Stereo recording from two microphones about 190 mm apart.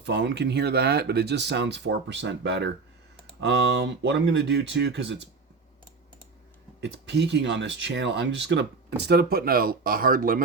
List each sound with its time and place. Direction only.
0.0 s speech: 65° right (ahead or behind)
6.8 s speech: 65° right (ahead or behind); by 10.4 s 50° right (ahead or behind)